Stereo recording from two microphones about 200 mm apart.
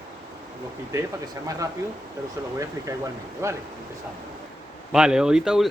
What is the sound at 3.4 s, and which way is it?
Speech, 15° right (ahead or behind).